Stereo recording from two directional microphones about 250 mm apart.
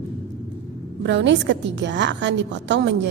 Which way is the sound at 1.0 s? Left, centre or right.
Right.